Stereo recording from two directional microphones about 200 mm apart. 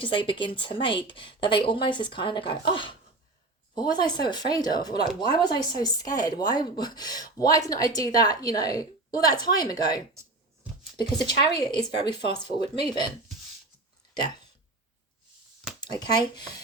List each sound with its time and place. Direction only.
0.0 s speech: 25° left (ahead or behind)
10.2 s a sound: 5° right (ahead or behind)
11.5 s speech: 20° left (ahead or behind)
15.8 s speech: 20° left (ahead or behind)